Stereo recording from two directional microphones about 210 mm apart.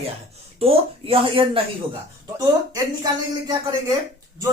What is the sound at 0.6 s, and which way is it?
Speech, 25° right (ahead or behind).